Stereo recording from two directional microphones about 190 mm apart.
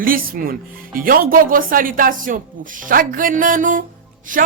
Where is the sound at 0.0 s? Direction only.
50° right (ahead or behind).